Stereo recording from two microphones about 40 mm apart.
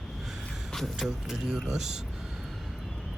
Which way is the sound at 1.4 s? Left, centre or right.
Centre.